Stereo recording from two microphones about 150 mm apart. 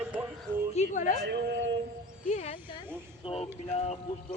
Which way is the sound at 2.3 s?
50° left (ahead or behind).